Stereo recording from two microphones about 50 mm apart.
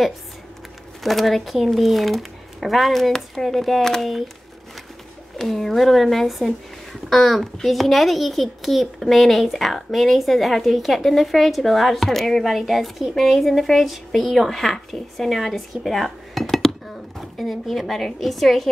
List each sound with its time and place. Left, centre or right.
1.0 s speech: centre
5.4 s speech: centre